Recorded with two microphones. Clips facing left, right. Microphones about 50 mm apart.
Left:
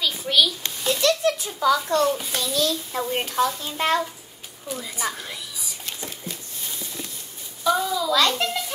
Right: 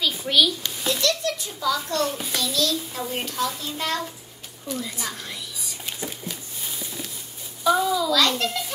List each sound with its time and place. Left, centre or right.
0.0 s a sound: centre
1.0 s a sound: left
2.0 s a child's voice: centre
2.5 s a child's voice: centre
4.6 s a child's voice: centre
5.1 s whispering: centre
5.9 s a sound: centre
7.6 s a child's voice: centre
8.1 s a child's voice: centre